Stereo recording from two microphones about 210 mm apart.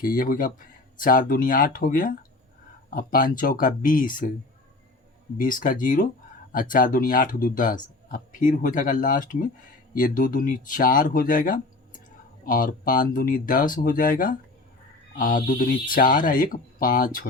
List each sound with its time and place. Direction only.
0.0 s speech: 45° left (ahead or behind)
5.4 s speech: 40° left (ahead or behind)